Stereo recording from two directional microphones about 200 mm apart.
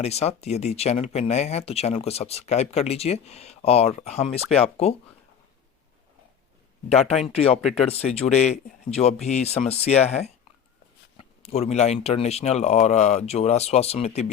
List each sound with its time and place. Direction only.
0.0 s speech: 30° left (ahead or behind)
4.5 s speech: centre (ahead or behind)
7.3 s speech: 30° left (ahead or behind)
7.6 s speech: centre (ahead or behind)
7.9 s speech: 30° left (ahead or behind)